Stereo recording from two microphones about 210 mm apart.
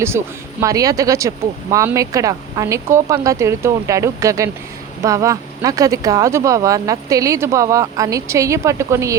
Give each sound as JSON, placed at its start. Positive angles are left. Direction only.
{"t": 0.1, "sound": "speech", "side_deg": -10}